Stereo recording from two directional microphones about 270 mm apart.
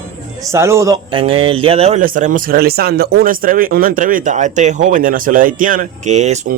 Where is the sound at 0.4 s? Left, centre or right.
Centre.